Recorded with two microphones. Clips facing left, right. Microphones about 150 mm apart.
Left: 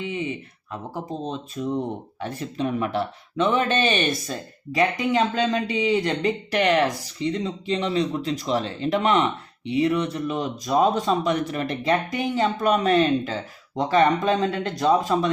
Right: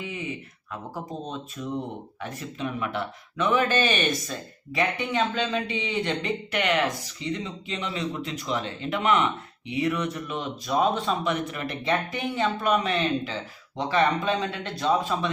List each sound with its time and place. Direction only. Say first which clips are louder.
0.7 s speech: left 3 dB; 30° left (ahead or behind)